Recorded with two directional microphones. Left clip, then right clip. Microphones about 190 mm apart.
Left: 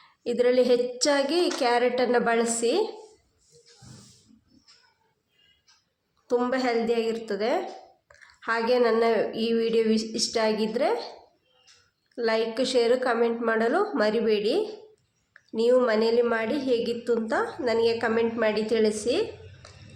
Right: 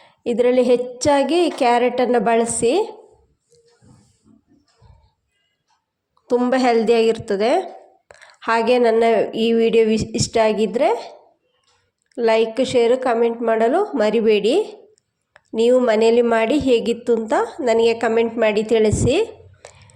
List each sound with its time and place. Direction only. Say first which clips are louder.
0.0 s a woman's voice: right 6 dB; 25° right (ahead or behind)
6.2 s a woman's voice: right 8 dB; 30° right (ahead or behind)
12.1 s a woman's voice: right 9 dB; 30° right (ahead or behind)